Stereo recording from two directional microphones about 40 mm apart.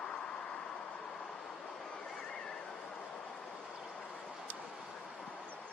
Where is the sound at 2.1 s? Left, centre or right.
Centre.